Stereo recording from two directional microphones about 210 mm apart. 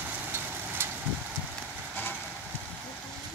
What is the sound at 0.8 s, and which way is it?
Vehicle, 10° right (ahead or behind).